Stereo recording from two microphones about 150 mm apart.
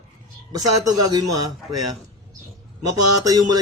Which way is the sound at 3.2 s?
25° right (ahead or behind).